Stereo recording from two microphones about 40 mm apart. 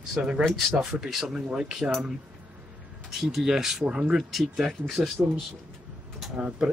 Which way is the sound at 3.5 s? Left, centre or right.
Centre.